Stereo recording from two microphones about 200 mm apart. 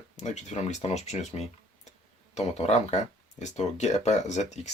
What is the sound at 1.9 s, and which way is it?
Tick, 35° left (ahead or behind).